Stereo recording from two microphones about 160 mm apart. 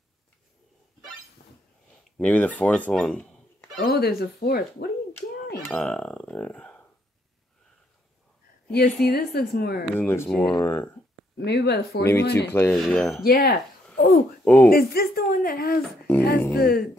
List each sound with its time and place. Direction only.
2.1 s speech: 10° left (ahead or behind)
3.8 s a woman's voice: 75° left (ahead or behind)
5.7 s speech: 5° left (ahead or behind)
8.7 s a woman's voice: 75° left (ahead or behind)
9.9 s speech: 15° left (ahead or behind)
11.3 s speech: 90° left
12.4 s speech: 15° left (ahead or behind)
12.7 s speech: 5° left (ahead or behind)
13.2 s a woman's voice: 70° left (ahead or behind)
13.9 s speech: 60° left (ahead or behind)
14.4 s speech: 10° left (ahead or behind)
14.7 s a woman's voice: 70° left (ahead or behind)